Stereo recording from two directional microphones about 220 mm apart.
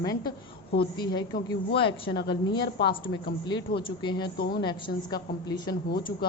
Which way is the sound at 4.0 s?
20° left (ahead or behind).